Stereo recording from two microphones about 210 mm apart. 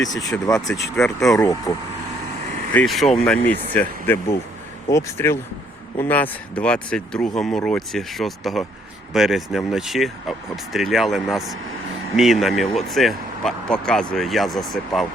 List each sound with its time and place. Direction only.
0.1 s speech: 15° left (ahead or behind)
2.7 s speech: centre (ahead or behind)